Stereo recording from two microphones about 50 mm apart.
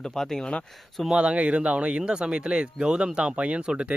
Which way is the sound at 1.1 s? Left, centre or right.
Right.